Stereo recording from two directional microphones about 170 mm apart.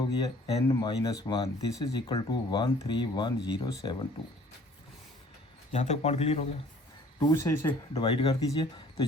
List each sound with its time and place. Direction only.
0.0 s speech: 35° left (ahead or behind)
0.6 s speech: 25° left (ahead or behind)
5.7 s speech: 40° left (ahead or behind)
7.3 s speech: 20° left (ahead or behind)
8.0 s speech: 35° left (ahead or behind)